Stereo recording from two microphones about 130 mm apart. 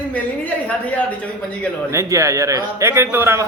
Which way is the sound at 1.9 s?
20° right (ahead or behind).